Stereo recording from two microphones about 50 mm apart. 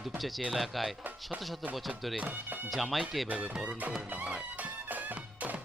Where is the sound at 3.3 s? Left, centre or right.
Centre.